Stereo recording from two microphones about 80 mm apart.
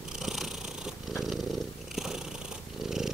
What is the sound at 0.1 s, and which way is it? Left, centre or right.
Purr, centre.